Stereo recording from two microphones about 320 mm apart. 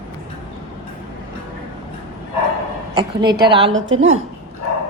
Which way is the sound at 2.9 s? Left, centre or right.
Centre.